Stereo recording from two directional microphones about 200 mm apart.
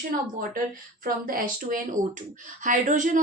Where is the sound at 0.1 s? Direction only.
45° right (ahead or behind).